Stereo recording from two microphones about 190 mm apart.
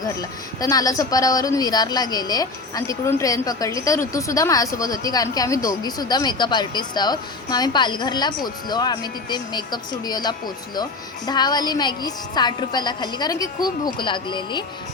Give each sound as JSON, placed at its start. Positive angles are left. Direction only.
{"t": 0.0, "sound": "speech", "side_deg": 20}